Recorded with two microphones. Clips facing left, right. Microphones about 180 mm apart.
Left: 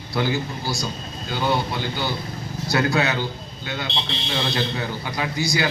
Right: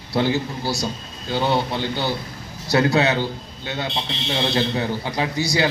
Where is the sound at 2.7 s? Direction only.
25° right (ahead or behind).